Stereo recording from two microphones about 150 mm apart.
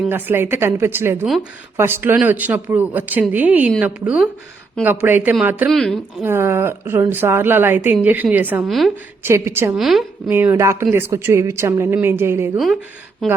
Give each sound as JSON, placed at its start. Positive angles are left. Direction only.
{"t": 0.1, "sound": "a woman's voice", "side_deg": -15}
{"t": 6.2, "sound": "a woman's voice", "side_deg": -15}
{"t": 8.6, "sound": "a woman's voice", "side_deg": 0}
{"t": 9.2, "sound": "a woman's voice", "side_deg": -15}
{"t": 9.7, "sound": "a woman's voice", "side_deg": 0}
{"t": 10.2, "sound": "a woman's voice", "side_deg": -15}
{"t": 13.2, "sound": "a woman's voice", "side_deg": 0}